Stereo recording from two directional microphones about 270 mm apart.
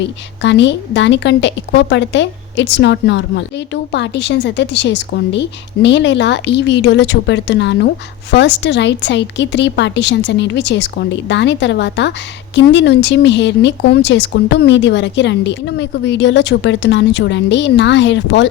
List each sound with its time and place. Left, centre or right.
0.0 s a woman's voice: left